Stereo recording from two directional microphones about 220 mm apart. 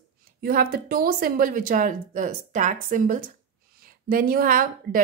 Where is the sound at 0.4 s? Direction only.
40° right (ahead or behind).